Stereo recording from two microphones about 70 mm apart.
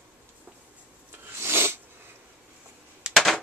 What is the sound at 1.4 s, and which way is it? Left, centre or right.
Sneeze, right.